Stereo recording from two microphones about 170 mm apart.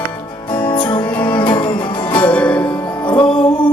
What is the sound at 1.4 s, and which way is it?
Music, 25° left (ahead or behind).